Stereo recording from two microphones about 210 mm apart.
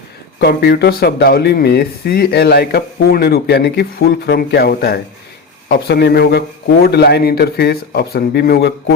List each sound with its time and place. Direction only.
0.3 s speech: 50° left (ahead or behind)